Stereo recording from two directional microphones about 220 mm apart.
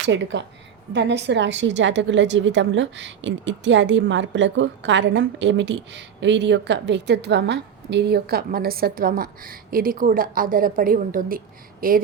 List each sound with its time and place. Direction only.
0.0 s a woman's voice: 55° right (ahead or behind)